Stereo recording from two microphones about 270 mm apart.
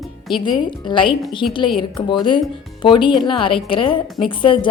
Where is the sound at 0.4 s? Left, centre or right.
Centre.